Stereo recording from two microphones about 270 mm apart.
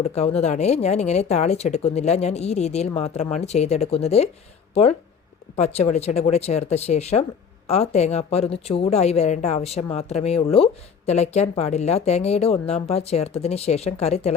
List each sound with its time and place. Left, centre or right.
0.0 s speech: left